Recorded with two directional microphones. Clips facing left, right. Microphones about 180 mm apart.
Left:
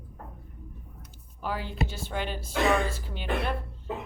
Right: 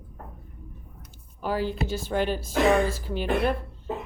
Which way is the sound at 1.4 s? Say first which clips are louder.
Right 5 dB; 40° right (ahead or behind).